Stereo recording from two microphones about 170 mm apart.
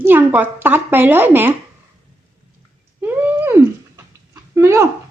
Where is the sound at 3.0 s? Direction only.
10° right (ahead or behind).